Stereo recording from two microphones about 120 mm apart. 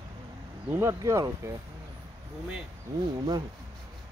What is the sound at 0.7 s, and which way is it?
Speech, 25° right (ahead or behind).